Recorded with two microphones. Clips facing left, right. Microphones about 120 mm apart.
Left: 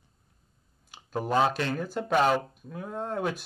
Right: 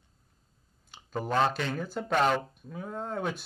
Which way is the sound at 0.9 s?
5° left (ahead or behind).